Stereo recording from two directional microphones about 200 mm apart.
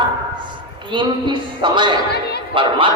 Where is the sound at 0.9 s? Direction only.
25° right (ahead or behind).